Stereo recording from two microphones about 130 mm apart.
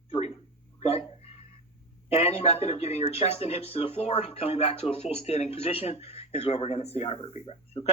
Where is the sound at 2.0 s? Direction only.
50° left (ahead or behind).